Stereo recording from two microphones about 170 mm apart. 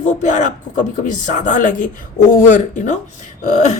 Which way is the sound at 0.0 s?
45° left (ahead or behind).